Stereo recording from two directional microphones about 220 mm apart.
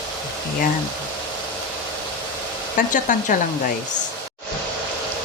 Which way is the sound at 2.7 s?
35° left (ahead or behind).